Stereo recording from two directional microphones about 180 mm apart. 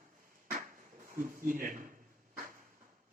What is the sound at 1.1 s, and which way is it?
Speech, 50° right (ahead or behind).